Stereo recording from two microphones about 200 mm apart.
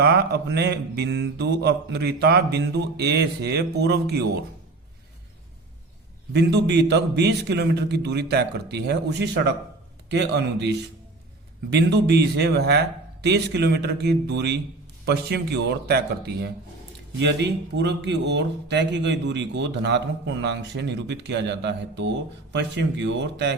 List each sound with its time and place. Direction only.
0.0 s speech: 55° right (ahead or behind)
6.3 s speech: 60° right (ahead or behind)